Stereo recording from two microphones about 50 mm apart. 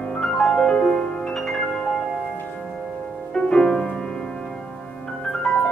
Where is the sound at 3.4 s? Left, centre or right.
Centre.